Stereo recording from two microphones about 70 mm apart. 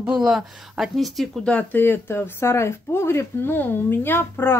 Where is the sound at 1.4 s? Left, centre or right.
Centre.